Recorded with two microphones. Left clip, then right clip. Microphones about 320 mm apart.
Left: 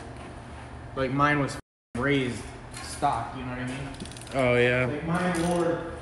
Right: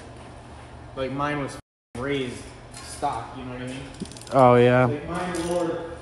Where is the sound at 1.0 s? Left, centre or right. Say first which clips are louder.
Left 3 dB; left.